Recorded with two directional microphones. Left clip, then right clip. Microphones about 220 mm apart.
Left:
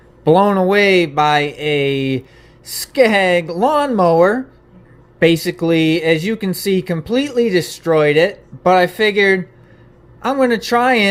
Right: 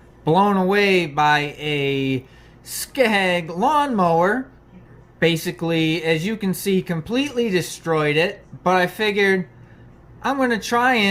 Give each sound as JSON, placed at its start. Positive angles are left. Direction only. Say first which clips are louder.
{"t": 0.3, "sound": "speech", "louder": "left 5 dB", "side_deg": 30}